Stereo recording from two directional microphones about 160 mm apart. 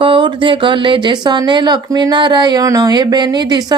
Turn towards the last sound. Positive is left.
turn(degrees=-25)  # may be behind; listen again after turning